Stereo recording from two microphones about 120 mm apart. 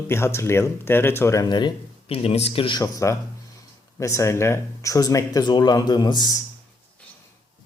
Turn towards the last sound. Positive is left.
turn(degrees=30)  # may be behind; listen again after turning